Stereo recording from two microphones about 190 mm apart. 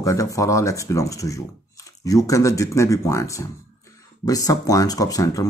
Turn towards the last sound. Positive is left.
turn(degrees=20)  # may be behind; listen again after turning